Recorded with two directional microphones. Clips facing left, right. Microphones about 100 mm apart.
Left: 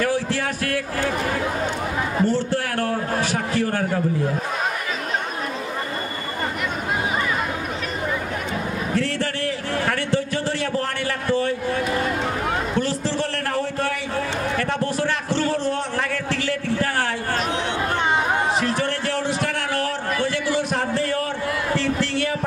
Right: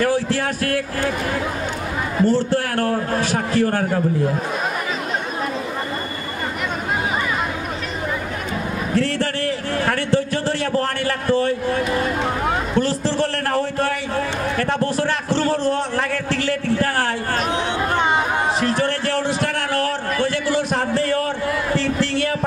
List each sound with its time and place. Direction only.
0.0 s a man's voice: 40° right (ahead or behind)
2.3 s a man's voice: 35° right (ahead or behind)
8.9 s a man's voice: 35° right (ahead or behind)
18.6 s a sound: 35° right (ahead or behind)
20.5 s music: 35° right (ahead or behind)